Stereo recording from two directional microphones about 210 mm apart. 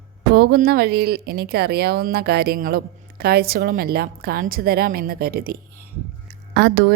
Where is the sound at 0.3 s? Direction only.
45° right (ahead or behind).